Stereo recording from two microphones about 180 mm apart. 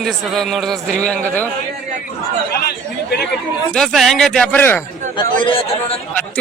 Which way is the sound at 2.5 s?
65° left (ahead or behind).